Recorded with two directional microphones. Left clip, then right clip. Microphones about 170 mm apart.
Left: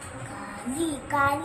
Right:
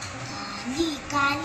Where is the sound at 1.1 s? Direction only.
30° left (ahead or behind).